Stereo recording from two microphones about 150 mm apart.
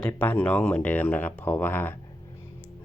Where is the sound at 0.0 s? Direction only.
10° left (ahead or behind).